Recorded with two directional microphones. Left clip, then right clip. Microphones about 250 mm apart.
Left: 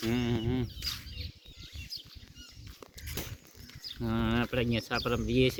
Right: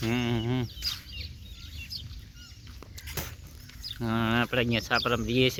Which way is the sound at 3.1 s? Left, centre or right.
Centre.